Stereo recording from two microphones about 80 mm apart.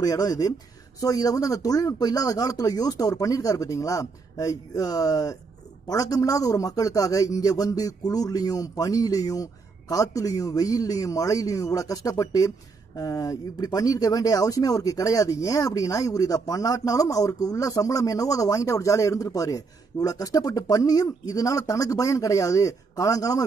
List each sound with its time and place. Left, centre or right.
0.0 s a man's voice: left